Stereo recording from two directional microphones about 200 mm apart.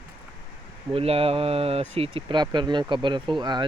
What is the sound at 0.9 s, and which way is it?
Speech, 30° right (ahead or behind).